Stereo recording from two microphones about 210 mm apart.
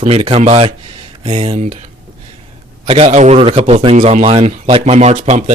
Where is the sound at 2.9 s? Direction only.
30° right (ahead or behind).